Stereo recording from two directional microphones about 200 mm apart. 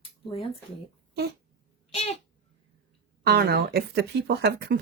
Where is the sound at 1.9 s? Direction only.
30° left (ahead or behind).